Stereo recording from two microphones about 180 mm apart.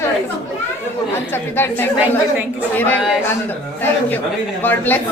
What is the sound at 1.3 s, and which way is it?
A woman's voice, 10° left (ahead or behind).